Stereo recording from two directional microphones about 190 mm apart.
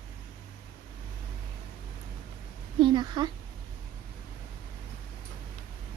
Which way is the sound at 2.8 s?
25° right (ahead or behind).